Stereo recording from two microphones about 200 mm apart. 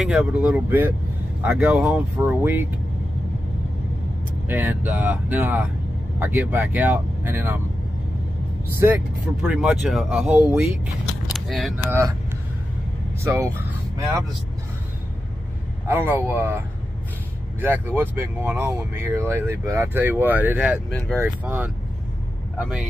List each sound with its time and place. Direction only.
0.0 s speech: 5° right (ahead or behind)
4.5 s speech: 10° right (ahead or behind)
8.7 s speech: 10° right (ahead or behind)
11.3 s a sound: centre (ahead or behind)
11.9 s speech: 15° right (ahead or behind)
13.2 s vehicle: 15° right (ahead or behind)
15.9 s speech: 10° right (ahead or behind)